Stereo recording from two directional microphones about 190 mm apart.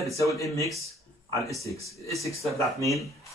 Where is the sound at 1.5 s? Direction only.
15° left (ahead or behind).